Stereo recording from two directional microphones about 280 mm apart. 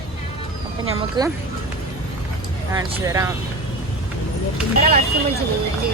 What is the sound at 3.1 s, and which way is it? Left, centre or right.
Speech, centre.